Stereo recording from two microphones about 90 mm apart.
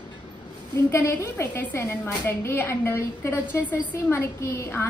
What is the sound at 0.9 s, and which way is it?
A woman's voice, 30° left (ahead or behind).